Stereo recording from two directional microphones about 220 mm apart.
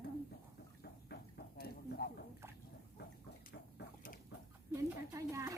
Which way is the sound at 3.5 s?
40° left (ahead or behind).